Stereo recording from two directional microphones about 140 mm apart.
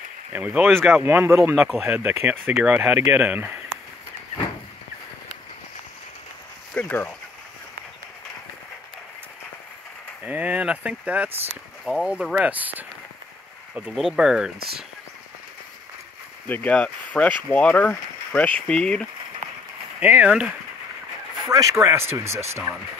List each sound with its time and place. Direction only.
0.3 s speech: 10° right (ahead or behind)
1.0 s speech: 20° right (ahead or behind)
1.5 s speech: 5° right (ahead or behind)
6.7 s speech: 10° left (ahead or behind)
10.2 s speech: 10° right (ahead or behind)
16.4 s speech: 10° left (ahead or behind)
20.0 s speech: 10° right (ahead or behind)
21.5 s speech: 25° right (ahead or behind)